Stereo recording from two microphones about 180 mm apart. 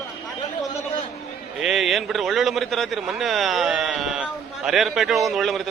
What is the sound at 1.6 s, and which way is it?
A man's voice, centre (ahead or behind).